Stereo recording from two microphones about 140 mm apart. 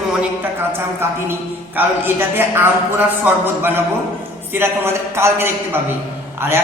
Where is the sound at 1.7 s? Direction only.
15° right (ahead or behind).